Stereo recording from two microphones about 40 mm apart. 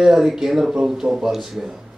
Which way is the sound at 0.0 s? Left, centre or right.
Centre.